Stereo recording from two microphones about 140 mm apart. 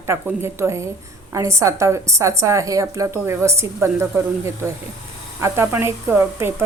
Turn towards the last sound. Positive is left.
turn(degrees=-15)  # may be behind; listen again after turning